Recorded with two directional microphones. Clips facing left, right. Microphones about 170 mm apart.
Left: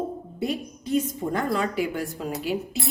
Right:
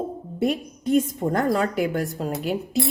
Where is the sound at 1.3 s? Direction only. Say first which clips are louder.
Right 3 dB; 45° right (ahead or behind).